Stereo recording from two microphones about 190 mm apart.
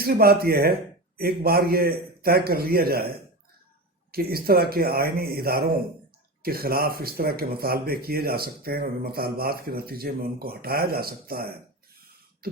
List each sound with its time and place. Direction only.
0.0 s speech: 55° right (ahead or behind)
4.1 s speech: 55° right (ahead or behind)